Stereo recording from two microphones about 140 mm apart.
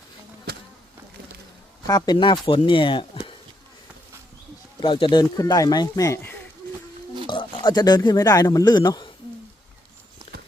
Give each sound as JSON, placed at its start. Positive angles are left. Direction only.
{"t": 0.5, "sound": "a sound", "side_deg": -90}
{"t": 1.9, "sound": "speech", "side_deg": 25}
{"t": 4.8, "sound": "speech", "side_deg": 35}
{"t": 5.4, "sound": "speech", "side_deg": 25}
{"t": 7.3, "sound": "speech", "side_deg": 35}
{"t": 10.3, "sound": "clip-clop", "side_deg": 45}